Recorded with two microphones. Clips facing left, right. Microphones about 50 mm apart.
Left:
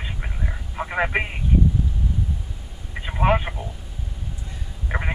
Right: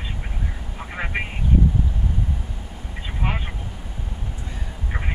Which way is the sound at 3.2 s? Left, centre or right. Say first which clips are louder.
Left 9 dB; left.